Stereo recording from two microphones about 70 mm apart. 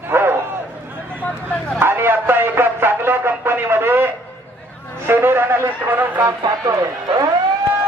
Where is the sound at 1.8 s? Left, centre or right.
Right.